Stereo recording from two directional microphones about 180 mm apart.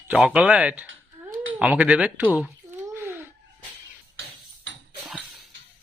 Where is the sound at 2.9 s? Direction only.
10° right (ahead or behind).